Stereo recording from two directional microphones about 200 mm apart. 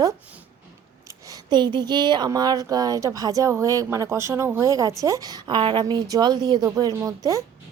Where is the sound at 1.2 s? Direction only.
20° right (ahead or behind).